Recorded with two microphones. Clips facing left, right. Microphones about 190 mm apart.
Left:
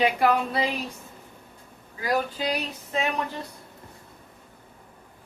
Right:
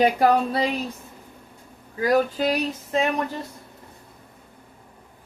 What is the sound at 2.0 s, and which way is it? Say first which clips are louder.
Speech: right 6 dB; 45° right (ahead or behind).